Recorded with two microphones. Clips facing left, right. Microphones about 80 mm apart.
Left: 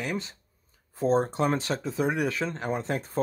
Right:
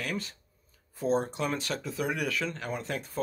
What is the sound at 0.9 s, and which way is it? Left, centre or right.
Speech, left.